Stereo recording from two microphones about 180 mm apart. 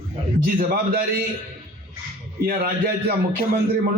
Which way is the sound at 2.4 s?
55° right (ahead or behind).